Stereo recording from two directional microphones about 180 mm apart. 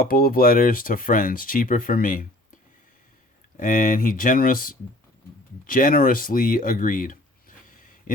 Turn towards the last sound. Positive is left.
turn(degrees=45)  # may be behind; listen again after turning